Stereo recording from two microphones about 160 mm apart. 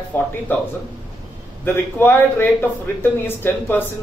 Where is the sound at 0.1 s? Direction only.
10° left (ahead or behind).